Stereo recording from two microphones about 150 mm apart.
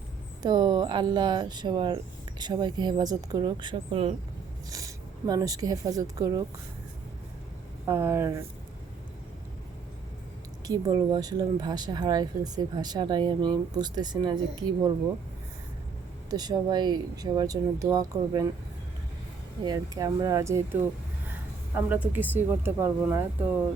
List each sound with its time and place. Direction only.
0.4 s speech: 30° right (ahead or behind)
4.7 s speech: 25° right (ahead or behind)
7.9 s speech: 15° right (ahead or behind)
10.7 s speech: 25° right (ahead or behind)
16.3 s speech: 25° right (ahead or behind)
19.6 s speech: 25° right (ahead or behind)
21.8 s speech: 10° right (ahead or behind)